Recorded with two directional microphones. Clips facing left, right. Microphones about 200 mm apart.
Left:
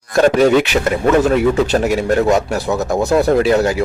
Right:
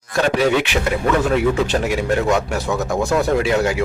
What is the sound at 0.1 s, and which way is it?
A man's voice, 45° left (ahead or behind).